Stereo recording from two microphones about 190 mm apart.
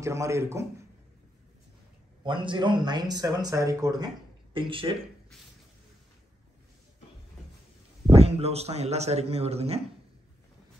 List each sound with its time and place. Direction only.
0.0 s a man's voice: 15° right (ahead or behind)
2.2 s speech: 25° right (ahead or behind)
8.1 s a man's voice: 35° right (ahead or behind)